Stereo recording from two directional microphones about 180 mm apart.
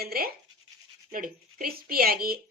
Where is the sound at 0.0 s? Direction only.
55° right (ahead or behind).